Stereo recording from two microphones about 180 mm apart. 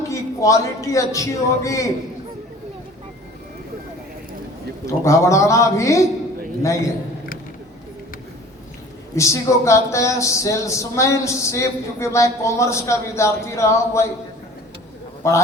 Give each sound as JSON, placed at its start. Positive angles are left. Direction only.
{"t": 0.1, "sound": "speech", "side_deg": 15}
{"t": 4.9, "sound": "speech", "side_deg": 15}
{"t": 9.1, "sound": "speech", "side_deg": 15}
{"t": 15.2, "sound": "speech", "side_deg": 15}